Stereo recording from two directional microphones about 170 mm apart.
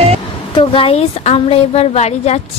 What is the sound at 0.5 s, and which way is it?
A woman's voice, 30° left (ahead or behind).